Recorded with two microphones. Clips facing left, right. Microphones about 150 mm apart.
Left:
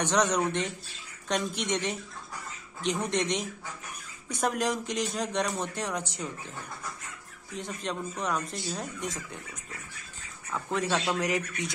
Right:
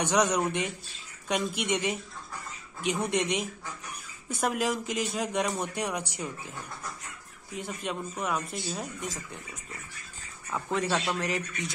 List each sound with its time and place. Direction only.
0.0 s speech: 10° right (ahead or behind)
7.5 s speech: 5° right (ahead or behind)
10.7 s speech: centre (ahead or behind)
11.1 s speech: 10° left (ahead or behind)